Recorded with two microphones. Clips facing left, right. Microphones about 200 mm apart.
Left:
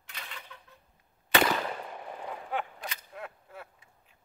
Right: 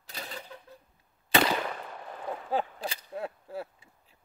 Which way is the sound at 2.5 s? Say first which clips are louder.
Right 6 dB; 30° right (ahead or behind).